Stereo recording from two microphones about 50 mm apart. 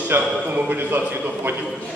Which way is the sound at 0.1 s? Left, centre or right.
Right.